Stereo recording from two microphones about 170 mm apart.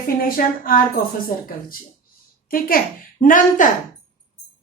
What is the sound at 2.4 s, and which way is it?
A woman's voice, 60° left (ahead or behind).